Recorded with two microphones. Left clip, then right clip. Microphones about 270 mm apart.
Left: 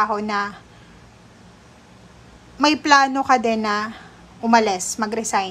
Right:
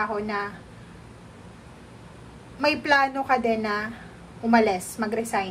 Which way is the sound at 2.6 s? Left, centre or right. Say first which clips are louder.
Left 6 dB; centre.